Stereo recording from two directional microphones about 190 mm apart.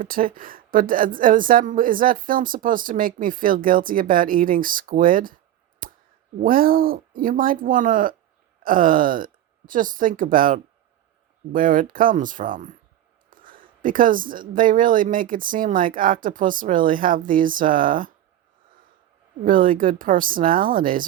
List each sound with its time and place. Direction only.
0.0 s a woman's voice: 45° right (ahead or behind)
6.4 s a woman's voice: 50° right (ahead or behind)
19.5 s a woman's voice: 45° right (ahead or behind)